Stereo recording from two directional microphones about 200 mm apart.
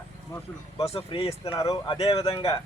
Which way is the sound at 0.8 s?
30° left (ahead or behind).